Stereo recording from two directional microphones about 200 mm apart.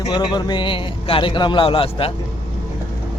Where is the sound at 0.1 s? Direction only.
20° left (ahead or behind).